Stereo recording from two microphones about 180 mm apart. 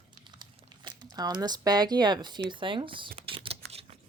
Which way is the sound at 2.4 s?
25° right (ahead or behind).